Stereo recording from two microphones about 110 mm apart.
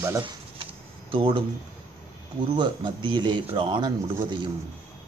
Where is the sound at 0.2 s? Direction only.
50° right (ahead or behind).